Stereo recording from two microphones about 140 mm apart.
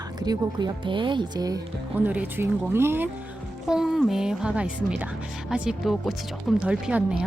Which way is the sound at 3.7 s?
5° right (ahead or behind).